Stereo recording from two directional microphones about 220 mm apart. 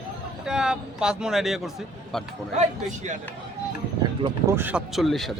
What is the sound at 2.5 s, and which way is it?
Speech, 35° right (ahead or behind).